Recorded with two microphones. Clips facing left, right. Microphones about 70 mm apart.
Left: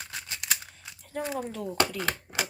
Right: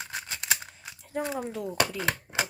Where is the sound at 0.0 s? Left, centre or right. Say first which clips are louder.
Right 3 dB; right.